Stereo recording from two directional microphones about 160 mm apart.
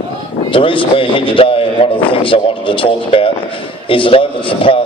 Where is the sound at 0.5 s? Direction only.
35° left (ahead or behind).